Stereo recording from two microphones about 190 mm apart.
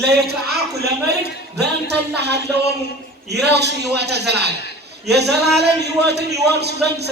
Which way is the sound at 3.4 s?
60° right (ahead or behind).